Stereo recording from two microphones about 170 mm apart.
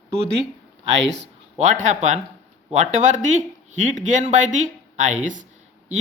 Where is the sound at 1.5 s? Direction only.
45° right (ahead or behind).